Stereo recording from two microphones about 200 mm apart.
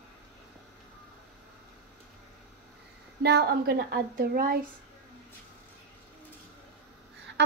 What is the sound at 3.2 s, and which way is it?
Speech, 50° right (ahead or behind).